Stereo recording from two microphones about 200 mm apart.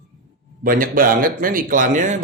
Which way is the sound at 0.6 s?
45° right (ahead or behind).